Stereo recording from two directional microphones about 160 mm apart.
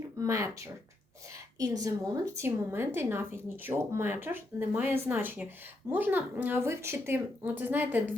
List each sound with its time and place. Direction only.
0.2 s a woman's voice: 20° right (ahead or behind)
1.5 s a woman's voice: 25° right (ahead or behind)